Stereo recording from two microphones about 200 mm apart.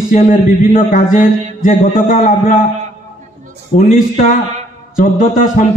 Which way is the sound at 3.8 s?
40° left (ahead or behind).